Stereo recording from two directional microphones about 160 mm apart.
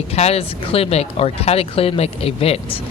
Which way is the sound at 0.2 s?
40° left (ahead or behind).